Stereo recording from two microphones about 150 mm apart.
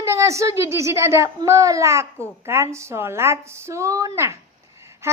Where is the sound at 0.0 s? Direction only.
20° right (ahead or behind).